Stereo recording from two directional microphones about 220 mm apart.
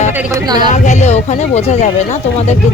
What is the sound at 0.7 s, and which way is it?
Speech, 30° left (ahead or behind).